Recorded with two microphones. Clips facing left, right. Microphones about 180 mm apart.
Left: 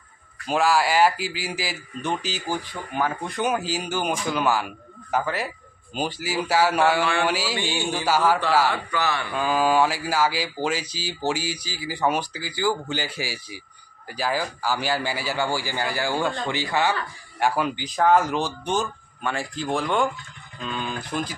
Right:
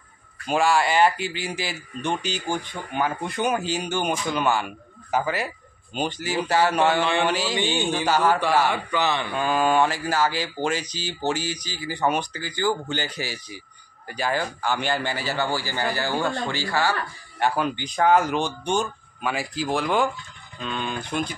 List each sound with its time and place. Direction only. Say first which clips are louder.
0.5 s speech: even; centre (ahead or behind)
7.0 s a man's voice: right 1 dB; 20° right (ahead or behind)
7.2 s speech: right 1 dB; 5° left (ahead or behind)
7.5 s speech: right 3 dB; 20° right (ahead or behind)
8.1 s speech: left 1 dB; 5° left (ahead or behind)
8.6 s a man's voice: right 1 dB; 20° right (ahead or behind)
9.3 s speech: left 2 dB; 5° left (ahead or behind)
17.4 s speech: even; 5° left (ahead or behind)